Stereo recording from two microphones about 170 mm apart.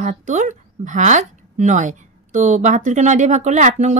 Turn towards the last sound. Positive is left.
turn(degrees=-45)  # may be behind; listen again after turning